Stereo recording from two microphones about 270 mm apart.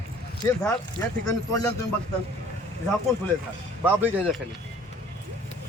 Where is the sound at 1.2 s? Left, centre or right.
Centre.